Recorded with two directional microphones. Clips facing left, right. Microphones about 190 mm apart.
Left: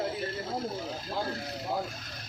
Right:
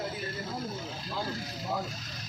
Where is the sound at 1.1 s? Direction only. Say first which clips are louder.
Left 2 dB; 55° left (ahead or behind).